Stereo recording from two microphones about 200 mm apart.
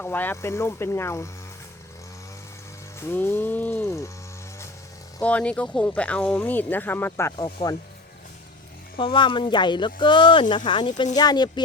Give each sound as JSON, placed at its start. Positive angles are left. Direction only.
{"t": 0.0, "sound": "speech", "side_deg": 10}
{"t": 3.0, "sound": "speech", "side_deg": 10}
{"t": 5.2, "sound": "speech", "side_deg": 5}
{"t": 9.0, "sound": "speech", "side_deg": 25}